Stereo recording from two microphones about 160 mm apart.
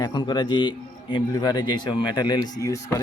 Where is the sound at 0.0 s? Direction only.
25° left (ahead or behind).